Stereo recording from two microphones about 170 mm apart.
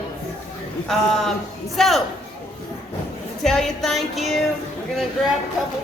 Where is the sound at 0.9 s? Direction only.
Centre (ahead or behind).